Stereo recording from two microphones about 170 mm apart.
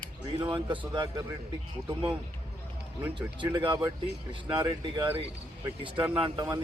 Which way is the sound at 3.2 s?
30° right (ahead or behind).